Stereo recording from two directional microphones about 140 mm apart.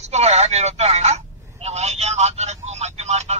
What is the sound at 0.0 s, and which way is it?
A man's voice, 50° right (ahead or behind).